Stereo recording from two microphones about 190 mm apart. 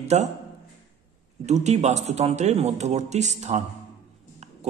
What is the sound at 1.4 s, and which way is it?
A man's voice, 35° right (ahead or behind).